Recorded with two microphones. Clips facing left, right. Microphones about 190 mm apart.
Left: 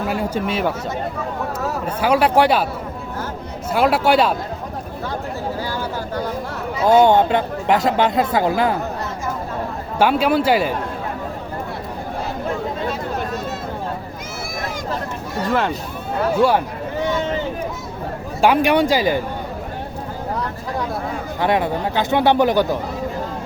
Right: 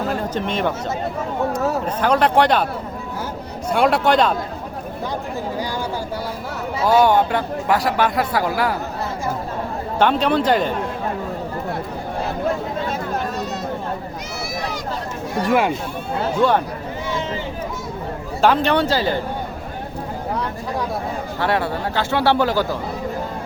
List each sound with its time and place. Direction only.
0.1 s speech: 10° left (ahead or behind)
2.0 s speech: 10° left (ahead or behind)
3.7 s speech: 5° left (ahead or behind)
6.8 s a man's voice: 20° left (ahead or behind)
10.0 s speech: 5° left (ahead or behind)
15.4 s speech: 10° right (ahead or behind)
18.4 s speech: 10° left (ahead or behind)
21.4 s speech: 15° left (ahead or behind)